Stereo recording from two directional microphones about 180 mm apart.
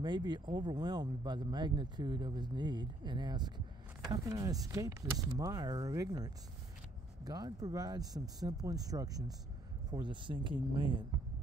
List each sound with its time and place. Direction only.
0.0 s speech: 25° right (ahead or behind)